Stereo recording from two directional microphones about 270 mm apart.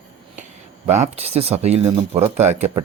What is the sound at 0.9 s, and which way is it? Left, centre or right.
Speech, right.